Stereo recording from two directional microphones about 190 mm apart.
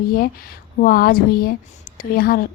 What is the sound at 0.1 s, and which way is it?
A woman's voice, 50° left (ahead or behind).